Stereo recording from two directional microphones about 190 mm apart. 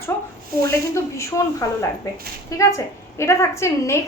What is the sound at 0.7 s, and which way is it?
A woman's voice, 15° left (ahead or behind).